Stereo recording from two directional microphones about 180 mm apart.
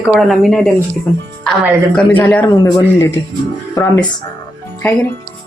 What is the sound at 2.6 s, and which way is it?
Speech, 15° left (ahead or behind).